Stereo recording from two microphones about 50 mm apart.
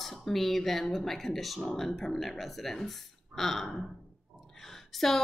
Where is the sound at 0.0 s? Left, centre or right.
Centre.